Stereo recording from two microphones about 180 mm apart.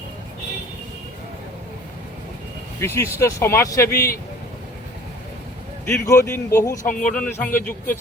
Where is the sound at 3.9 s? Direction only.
55° left (ahead or behind).